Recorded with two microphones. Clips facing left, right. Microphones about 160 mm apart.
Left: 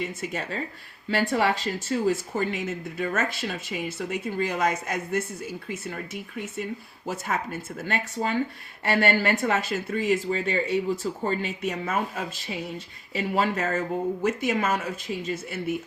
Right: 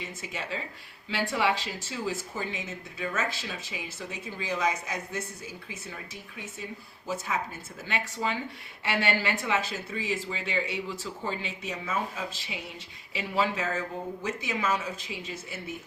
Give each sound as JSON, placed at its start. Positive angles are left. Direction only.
{"t": 0.0, "sound": "speech", "side_deg": 50}
{"t": 7.9, "sound": "speech", "side_deg": 45}